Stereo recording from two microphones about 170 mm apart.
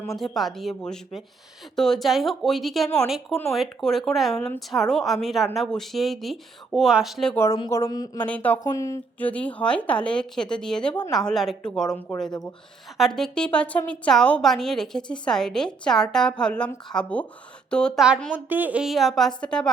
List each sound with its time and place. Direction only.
0.0 s a woman's voice: centre (ahead or behind)
7.3 s speech: 15° left (ahead or behind)
8.2 s a woman's voice: 10° left (ahead or behind)